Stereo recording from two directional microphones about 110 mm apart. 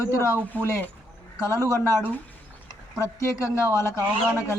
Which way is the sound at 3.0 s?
30° left (ahead or behind).